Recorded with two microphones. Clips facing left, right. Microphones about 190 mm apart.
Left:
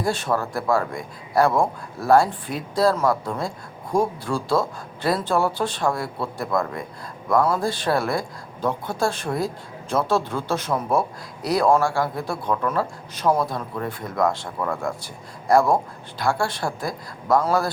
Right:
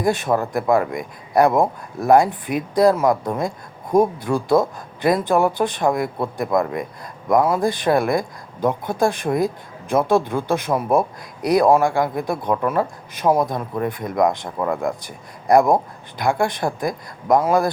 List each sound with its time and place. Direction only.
0.0 s a man's voice: 15° right (ahead or behind)